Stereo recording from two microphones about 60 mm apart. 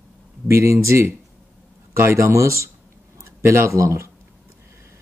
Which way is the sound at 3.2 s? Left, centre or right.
Right.